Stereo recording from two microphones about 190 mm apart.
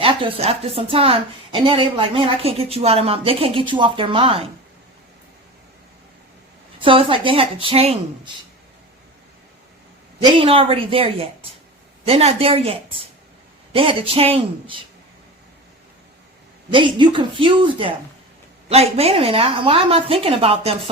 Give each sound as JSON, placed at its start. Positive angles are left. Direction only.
{"t": 0.0, "sound": "a woman's voice", "side_deg": -30}
{"t": 6.7, "sound": "a woman's voice", "side_deg": -25}
{"t": 10.2, "sound": "a woman's voice", "side_deg": -30}
{"t": 16.7, "sound": "a woman's voice", "side_deg": -25}